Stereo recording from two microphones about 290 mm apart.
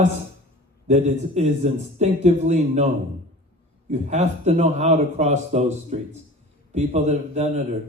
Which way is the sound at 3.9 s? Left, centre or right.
Right.